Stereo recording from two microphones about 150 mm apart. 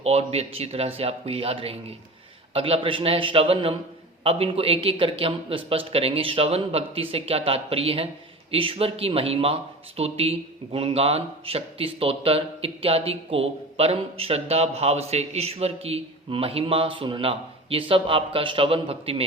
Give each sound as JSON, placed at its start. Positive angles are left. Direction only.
{"t": 0.0, "sound": "a man's voice", "side_deg": -45}